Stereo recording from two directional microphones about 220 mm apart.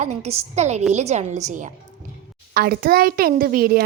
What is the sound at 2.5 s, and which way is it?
A child's voice, 45° right (ahead or behind).